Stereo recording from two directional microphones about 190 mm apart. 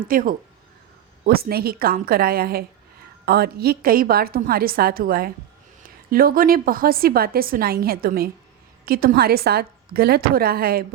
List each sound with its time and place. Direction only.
0.1 s a woman's voice: 50° right (ahead or behind)